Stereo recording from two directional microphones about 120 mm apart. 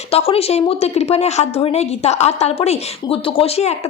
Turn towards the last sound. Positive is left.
turn(degrees=55)  # may be behind; listen again after turning